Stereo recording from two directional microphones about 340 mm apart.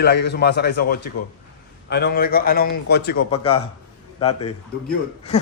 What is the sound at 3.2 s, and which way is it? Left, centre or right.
Speech, centre.